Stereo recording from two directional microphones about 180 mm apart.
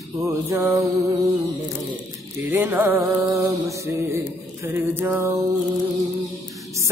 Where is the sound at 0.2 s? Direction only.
15° right (ahead or behind).